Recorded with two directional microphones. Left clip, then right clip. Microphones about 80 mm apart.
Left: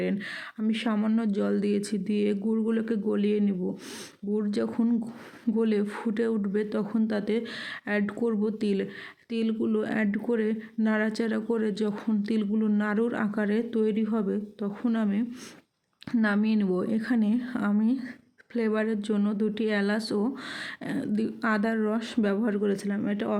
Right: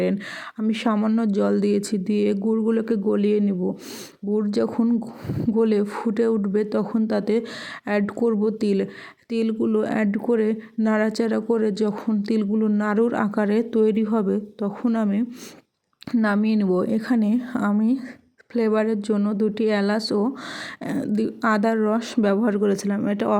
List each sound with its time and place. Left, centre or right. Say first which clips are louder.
0.7 s speech: right 6 dB; right
0.9 s speech: right 5 dB; right
1.2 s speech: right 7 dB; right
4.8 s speech: right 5 dB; centre
5.5 s speech: right 6 dB; right
12.5 s speech: right 5 dB; centre
12.8 s speech: right 6 dB; right